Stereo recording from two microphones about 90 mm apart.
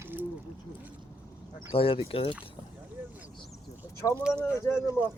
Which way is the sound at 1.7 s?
90° left.